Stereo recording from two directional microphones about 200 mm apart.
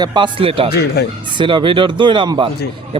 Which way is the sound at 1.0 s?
55° left (ahead or behind).